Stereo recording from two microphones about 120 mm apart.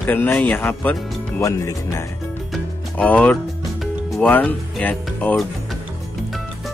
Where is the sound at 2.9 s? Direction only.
10° left (ahead or behind).